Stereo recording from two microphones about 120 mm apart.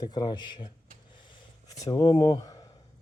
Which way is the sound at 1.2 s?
30° left (ahead or behind).